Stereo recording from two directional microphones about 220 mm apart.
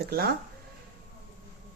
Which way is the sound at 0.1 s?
45° right (ahead or behind).